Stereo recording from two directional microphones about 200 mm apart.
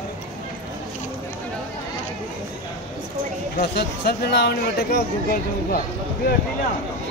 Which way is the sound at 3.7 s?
50° left (ahead or behind).